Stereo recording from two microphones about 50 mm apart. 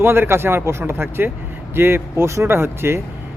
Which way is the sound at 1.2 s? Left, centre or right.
Right.